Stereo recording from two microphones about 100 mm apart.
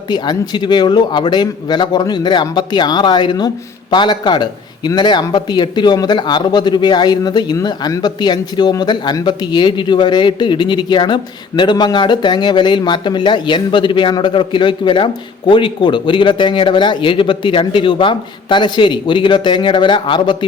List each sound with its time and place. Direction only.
0.1 s speech: 45° left (ahead or behind)